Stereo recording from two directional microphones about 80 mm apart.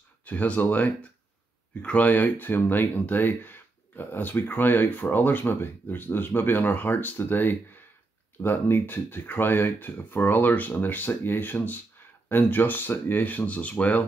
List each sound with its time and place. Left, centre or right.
0.2 s speech: centre